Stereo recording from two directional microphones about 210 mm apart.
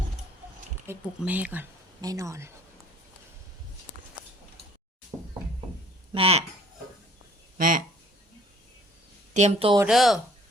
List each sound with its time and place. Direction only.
0.9 s speech: 5° right (ahead or behind)
5.1 s knock: 15° right (ahead or behind)
6.1 s speech: 30° right (ahead or behind)
9.3 s a woman's voice: 30° right (ahead or behind)
9.8 s speech: centre (ahead or behind)